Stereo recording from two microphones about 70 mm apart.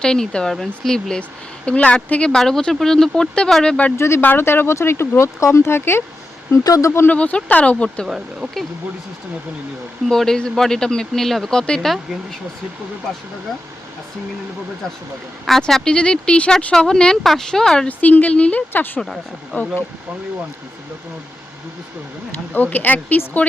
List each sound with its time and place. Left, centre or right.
0.0 s speech: centre
2.3 s speech: centre
3.9 s speech: left
6.7 s speech: left
7.1 s speech: centre
8.0 s speech: centre
10.1 s speech: centre
15.4 s speech: centre
17.8 s speech: left
22.5 s speech: left